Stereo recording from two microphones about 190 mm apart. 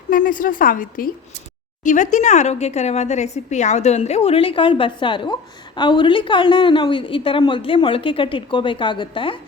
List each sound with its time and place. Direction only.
0.1 s speech: 45° left (ahead or behind); by 9.4 s 25° left (ahead or behind)